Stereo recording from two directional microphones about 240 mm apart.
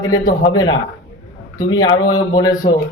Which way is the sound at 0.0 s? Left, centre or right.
Centre.